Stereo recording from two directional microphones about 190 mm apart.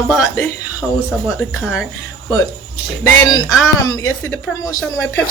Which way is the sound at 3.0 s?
20° left (ahead or behind).